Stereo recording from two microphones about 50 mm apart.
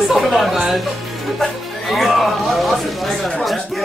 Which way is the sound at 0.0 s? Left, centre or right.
Centre.